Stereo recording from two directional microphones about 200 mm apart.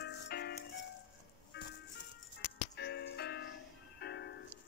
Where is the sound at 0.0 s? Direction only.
55° left (ahead or behind).